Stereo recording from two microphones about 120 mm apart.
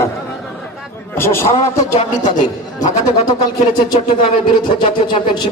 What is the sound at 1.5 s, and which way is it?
Speech, 55° left (ahead or behind).